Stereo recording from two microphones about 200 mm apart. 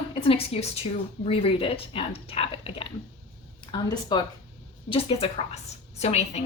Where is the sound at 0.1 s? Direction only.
30° left (ahead or behind).